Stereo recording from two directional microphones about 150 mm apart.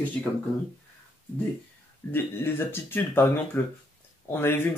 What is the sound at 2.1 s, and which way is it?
Speech, 15° left (ahead or behind).